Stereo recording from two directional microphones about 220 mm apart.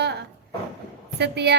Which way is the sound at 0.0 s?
50° right (ahead or behind).